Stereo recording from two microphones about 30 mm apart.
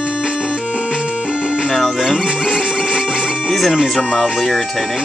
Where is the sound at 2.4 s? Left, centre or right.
Right.